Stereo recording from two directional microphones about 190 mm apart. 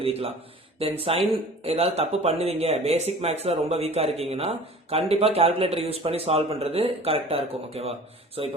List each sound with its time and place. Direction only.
0.0 s speech: 30° right (ahead or behind)